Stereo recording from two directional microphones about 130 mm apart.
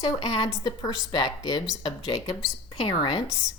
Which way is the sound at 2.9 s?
35° left (ahead or behind).